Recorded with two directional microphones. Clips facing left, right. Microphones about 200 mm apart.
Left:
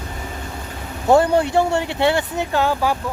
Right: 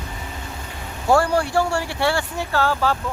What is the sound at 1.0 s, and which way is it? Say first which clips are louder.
Speech: left 3 dB; 20° left (ahead or behind).